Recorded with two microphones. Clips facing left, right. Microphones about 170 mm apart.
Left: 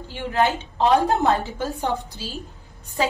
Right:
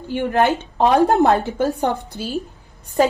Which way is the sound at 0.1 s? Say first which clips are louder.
Right 5 dB; 60° right (ahead or behind).